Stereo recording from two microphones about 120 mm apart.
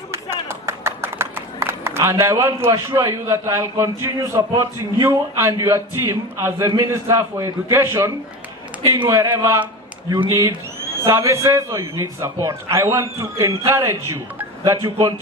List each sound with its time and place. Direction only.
0.1 s a man's voice: 20° right (ahead or behind)